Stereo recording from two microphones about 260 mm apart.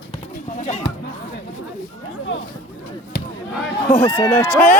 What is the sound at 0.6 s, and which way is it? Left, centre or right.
Speech, left.